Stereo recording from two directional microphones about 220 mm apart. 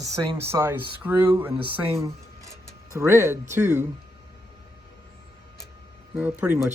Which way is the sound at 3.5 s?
10° right (ahead or behind).